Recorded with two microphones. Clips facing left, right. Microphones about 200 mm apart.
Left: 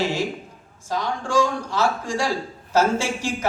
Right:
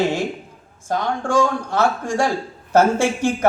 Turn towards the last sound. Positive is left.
turn(degrees=-55)  # may be behind; listen again after turning